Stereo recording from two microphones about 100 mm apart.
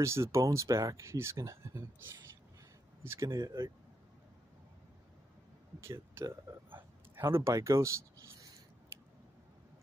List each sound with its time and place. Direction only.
0.0 s speech: 30° right (ahead or behind)
3.0 s speech: 25° right (ahead or behind)
5.8 s speech: 25° right (ahead or behind)